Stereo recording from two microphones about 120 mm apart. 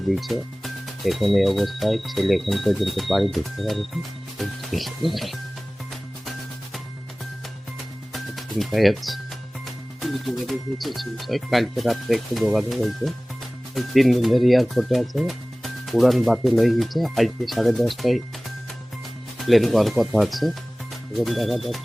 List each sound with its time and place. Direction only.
0.1 s speech: centre (ahead or behind)
8.1 s music: centre (ahead or behind)
9.6 s speech: centre (ahead or behind)
19.4 s speech: centre (ahead or behind)